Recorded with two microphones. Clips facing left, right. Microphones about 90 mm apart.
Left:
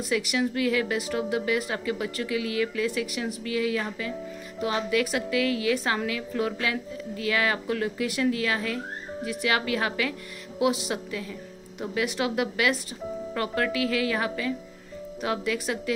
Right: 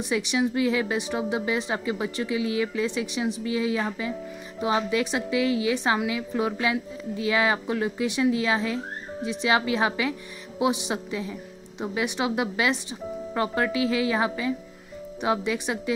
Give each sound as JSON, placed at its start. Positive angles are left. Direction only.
{"t": 0.1, "sound": "a woman's voice", "side_deg": -20}